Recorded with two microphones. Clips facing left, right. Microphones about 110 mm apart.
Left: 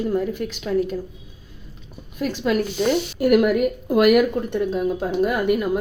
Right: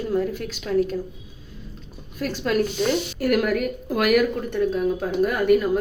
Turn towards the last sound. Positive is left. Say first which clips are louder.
# right 1 dB
turn(degrees=15)  # may be behind; listen again after turning